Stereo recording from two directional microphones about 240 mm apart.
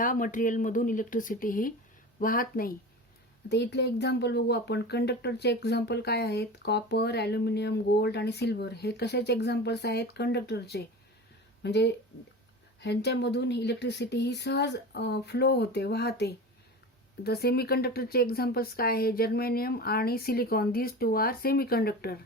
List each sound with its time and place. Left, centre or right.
0.0 s a woman's voice: left